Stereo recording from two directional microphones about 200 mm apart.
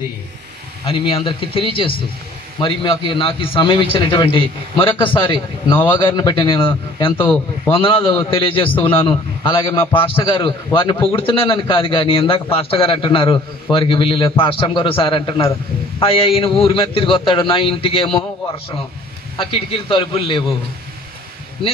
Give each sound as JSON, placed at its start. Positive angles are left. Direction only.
{"t": 0.8, "sound": "a man's voice", "side_deg": 25}
{"t": 19.3, "sound": "a man's voice", "side_deg": 25}